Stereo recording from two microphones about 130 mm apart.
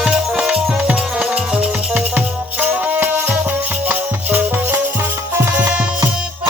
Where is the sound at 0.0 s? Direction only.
5° right (ahead or behind).